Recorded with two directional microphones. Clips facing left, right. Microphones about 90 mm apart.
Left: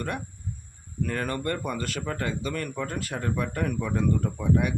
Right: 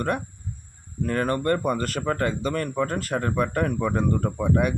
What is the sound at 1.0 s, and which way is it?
Speech, 40° right (ahead or behind).